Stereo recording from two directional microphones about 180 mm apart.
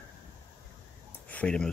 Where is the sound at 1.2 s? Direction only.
5° left (ahead or behind).